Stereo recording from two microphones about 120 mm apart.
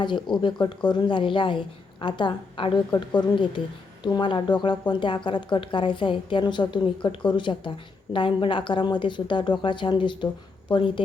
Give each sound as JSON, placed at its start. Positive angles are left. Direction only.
{"t": 0.0, "sound": "a woman's voice", "side_deg": 40}